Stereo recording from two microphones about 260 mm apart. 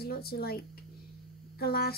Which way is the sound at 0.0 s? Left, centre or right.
Left.